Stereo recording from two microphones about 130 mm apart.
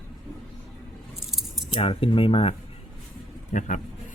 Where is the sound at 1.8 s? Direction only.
45° left (ahead or behind).